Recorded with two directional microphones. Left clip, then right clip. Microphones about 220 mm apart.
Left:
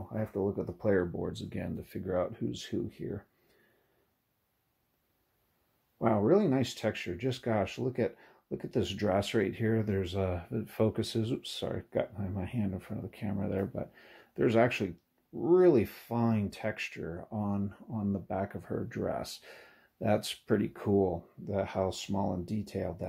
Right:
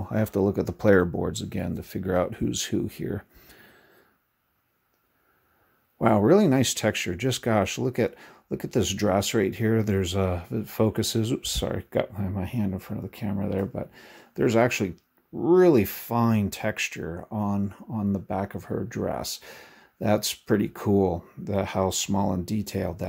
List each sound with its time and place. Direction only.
0.1 s speech: 45° right (ahead or behind)
5.9 s speech: 35° right (ahead or behind)